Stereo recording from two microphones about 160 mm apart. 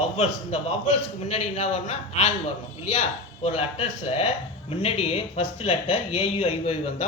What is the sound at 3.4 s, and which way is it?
Speech, 40° left (ahead or behind).